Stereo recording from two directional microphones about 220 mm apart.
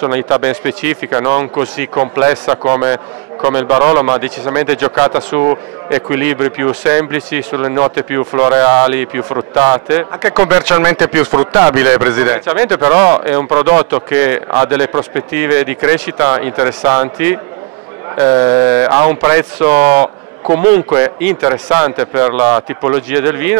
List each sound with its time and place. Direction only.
0.0 s a man's voice: 15° right (ahead or behind)